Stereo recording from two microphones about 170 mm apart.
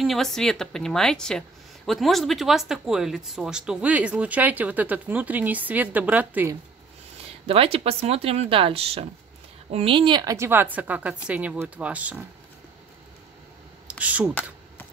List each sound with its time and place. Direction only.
0.0 s speech: centre (ahead or behind)
7.4 s speech: 35° right (ahead or behind); by 12.2 s 10° right (ahead or behind)
13.8 s a sound: 10° right (ahead or behind)